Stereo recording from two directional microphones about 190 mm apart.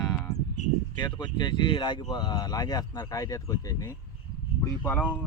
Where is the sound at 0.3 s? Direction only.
60° left (ahead or behind).